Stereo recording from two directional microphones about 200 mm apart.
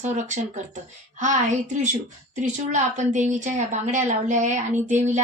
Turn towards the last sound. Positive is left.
turn(degrees=-35)  # may be behind; listen again after turning